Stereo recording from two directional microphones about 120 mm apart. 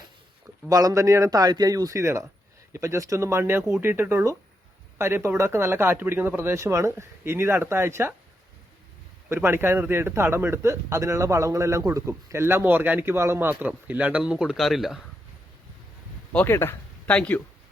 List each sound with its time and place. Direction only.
0.7 s a man's voice: 30° right (ahead or behind)
9.3 s a man's voice: 20° right (ahead or behind); by 15.0 s centre (ahead or behind)
16.3 s speech: 15° left (ahead or behind)